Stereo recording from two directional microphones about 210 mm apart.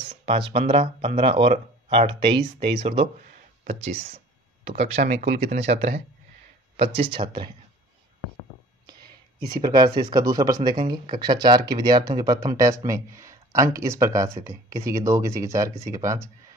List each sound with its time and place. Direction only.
0.2 s speech: 25° right (ahead or behind)
9.6 s speech: 20° right (ahead or behind)